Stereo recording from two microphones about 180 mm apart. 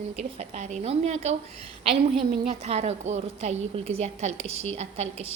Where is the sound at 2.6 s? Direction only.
35° right (ahead or behind).